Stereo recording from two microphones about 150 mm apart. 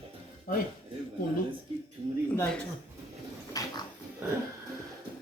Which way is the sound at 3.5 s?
25° left (ahead or behind).